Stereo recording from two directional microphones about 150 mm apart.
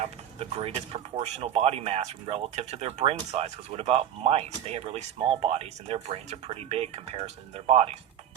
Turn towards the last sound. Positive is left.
turn(degrees=-45)  # may be behind; listen again after turning